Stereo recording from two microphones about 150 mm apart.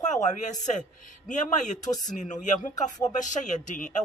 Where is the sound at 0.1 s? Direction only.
55° left (ahead or behind).